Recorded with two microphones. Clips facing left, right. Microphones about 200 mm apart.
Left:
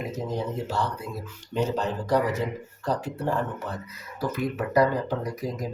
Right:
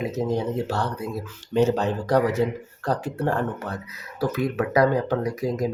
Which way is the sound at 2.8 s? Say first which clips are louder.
Right 3 dB; 65° right (ahead or behind).